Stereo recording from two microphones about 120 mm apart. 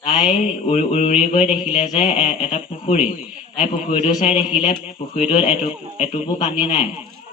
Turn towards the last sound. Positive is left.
turn(degrees=60)  # may be behind; listen again after turning